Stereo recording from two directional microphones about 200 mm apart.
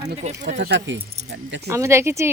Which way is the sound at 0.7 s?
65° right (ahead or behind).